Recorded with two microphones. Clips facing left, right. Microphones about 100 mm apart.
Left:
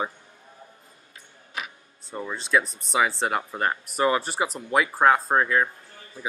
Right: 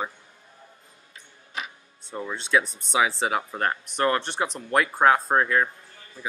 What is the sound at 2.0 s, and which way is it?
Speech, centre (ahead or behind).